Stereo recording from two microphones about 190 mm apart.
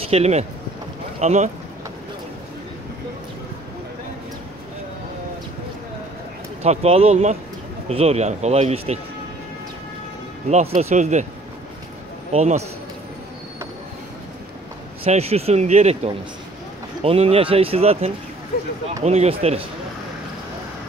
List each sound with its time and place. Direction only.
0.1 s speech: 35° right (ahead or behind)
6.6 s speech: 35° right (ahead or behind)
10.5 s speech: 35° right (ahead or behind)
12.3 s speech: 35° right (ahead or behind)
15.0 s speech: 35° right (ahead or behind)